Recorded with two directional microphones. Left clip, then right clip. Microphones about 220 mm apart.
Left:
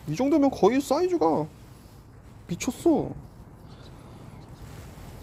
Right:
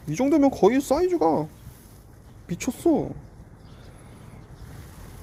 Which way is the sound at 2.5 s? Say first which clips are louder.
Right 1 dB; 15° right (ahead or behind).